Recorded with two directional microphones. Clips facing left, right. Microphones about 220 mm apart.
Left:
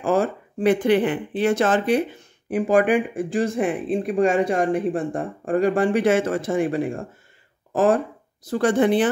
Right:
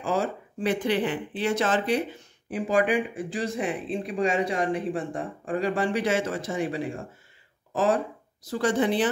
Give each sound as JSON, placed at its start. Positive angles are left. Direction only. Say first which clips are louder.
{"t": 0.0, "sound": "speech", "louder": "left 6 dB", "side_deg": 55}